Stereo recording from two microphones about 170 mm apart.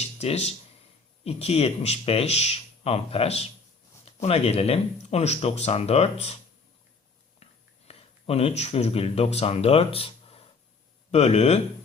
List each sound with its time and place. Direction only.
0.0 s a sound: 40° left (ahead or behind)
1.2 s speech: 35° left (ahead or behind)
7.9 s speech: 35° left (ahead or behind)